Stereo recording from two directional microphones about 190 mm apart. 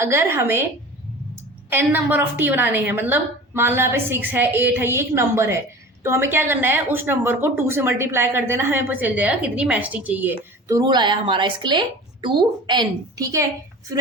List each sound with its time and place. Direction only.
0.0 s a woman's voice: 10° right (ahead or behind)
1.7 s a woman's voice: 10° right (ahead or behind)
10.7 s a woman's voice: 20° right (ahead or behind)